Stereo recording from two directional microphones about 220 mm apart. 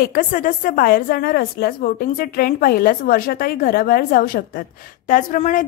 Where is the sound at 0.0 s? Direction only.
40° left (ahead or behind).